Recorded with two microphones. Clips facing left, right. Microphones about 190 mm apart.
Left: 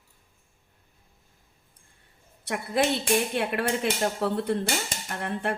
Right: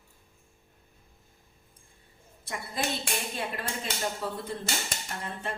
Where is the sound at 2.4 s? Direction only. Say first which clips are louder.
Left 8 dB; 70° left (ahead or behind).